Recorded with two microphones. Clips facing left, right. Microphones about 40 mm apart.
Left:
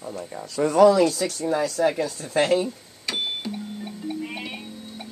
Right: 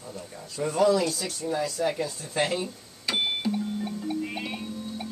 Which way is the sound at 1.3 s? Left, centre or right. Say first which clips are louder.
Left 5 dB; left.